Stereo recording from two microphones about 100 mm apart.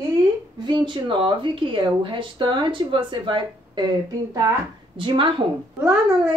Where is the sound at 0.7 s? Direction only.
55° right (ahead or behind).